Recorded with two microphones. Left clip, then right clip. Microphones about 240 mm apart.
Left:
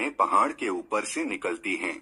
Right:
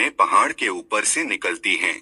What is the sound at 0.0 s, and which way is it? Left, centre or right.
Speech, right.